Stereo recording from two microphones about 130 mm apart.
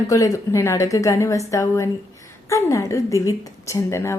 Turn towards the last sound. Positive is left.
turn(degrees=20)  # may be behind; listen again after turning